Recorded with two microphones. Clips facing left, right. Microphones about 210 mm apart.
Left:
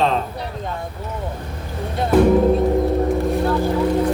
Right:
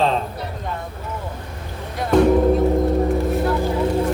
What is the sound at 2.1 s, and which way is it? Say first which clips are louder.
Speech: left 1 dB; 5° left (ahead or behind).